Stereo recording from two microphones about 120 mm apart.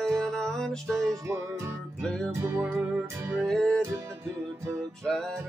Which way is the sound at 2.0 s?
5° left (ahead or behind).